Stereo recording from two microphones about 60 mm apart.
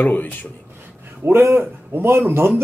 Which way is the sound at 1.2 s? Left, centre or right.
Right.